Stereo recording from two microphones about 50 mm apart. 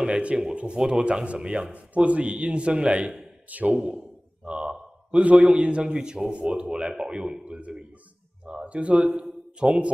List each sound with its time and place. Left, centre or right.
0.0 s speech: right
1.0 s a man's voice: right
3.7 s speech: centre
5.1 s a man's voice: right
8.6 s a man's voice: right